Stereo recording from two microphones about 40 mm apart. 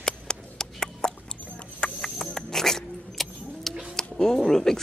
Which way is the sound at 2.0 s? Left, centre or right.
Centre.